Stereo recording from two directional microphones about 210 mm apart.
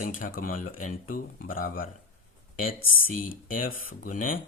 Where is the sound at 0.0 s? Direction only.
40° left (ahead or behind).